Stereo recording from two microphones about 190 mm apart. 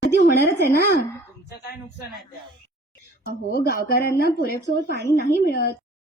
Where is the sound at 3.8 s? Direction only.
50° left (ahead or behind).